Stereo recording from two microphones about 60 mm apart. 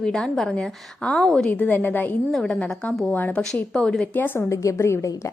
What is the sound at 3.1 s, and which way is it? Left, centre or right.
Speech, left.